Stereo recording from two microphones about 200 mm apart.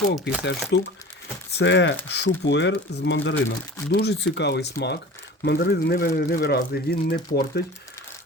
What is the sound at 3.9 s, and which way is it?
Speech, 55° left (ahead or behind).